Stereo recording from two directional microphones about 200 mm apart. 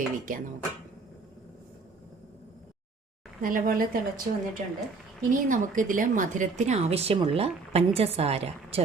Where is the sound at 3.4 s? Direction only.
45° right (ahead or behind).